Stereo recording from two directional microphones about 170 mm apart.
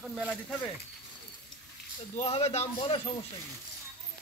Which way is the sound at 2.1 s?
35° left (ahead or behind).